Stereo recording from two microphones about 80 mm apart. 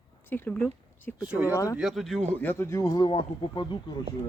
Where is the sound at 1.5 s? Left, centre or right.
Left.